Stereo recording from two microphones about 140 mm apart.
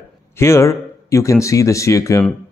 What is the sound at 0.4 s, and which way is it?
Speech, 20° left (ahead or behind).